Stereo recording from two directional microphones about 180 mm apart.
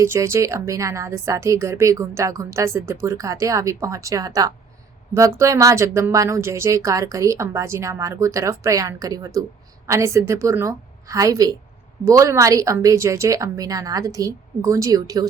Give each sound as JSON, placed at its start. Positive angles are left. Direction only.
{"t": 0.0, "sound": "a woman's voice", "side_deg": -15}